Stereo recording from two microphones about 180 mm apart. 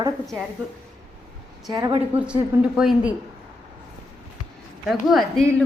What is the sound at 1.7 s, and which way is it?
Speech, 20° right (ahead or behind).